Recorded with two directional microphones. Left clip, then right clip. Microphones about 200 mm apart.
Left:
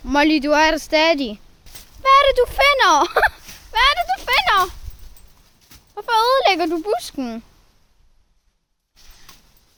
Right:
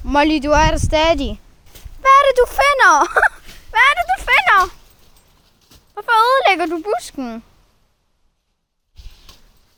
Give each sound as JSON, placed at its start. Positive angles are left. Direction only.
{"t": 0.0, "sound": "speech", "side_deg": 0}
{"t": 2.0, "sound": "speech", "side_deg": -15}
{"t": 3.7, "sound": "speech", "side_deg": -5}
{"t": 5.9, "sound": "speech", "side_deg": 0}